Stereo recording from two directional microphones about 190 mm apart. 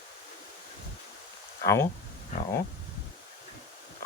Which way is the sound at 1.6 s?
15° left (ahead or behind).